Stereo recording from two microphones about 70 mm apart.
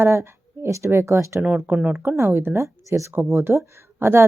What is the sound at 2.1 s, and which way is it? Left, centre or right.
Speech, right.